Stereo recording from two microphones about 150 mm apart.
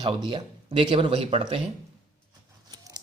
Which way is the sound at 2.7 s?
25° right (ahead or behind).